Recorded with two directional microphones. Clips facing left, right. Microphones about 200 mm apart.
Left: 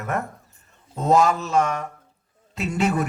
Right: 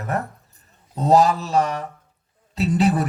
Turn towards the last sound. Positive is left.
turn(degrees=-35)  # may be behind; listen again after turning